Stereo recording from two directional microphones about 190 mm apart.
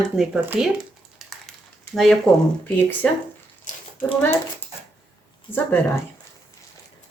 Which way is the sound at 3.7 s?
40° left (ahead or behind).